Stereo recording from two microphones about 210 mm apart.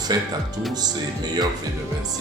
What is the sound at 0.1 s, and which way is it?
Speech, 20° right (ahead or behind).